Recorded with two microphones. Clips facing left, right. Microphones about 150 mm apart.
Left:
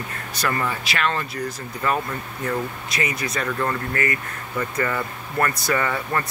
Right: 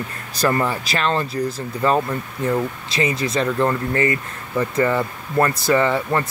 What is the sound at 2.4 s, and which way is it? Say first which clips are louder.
Speech: right 5 dB; 25° right (ahead or behind).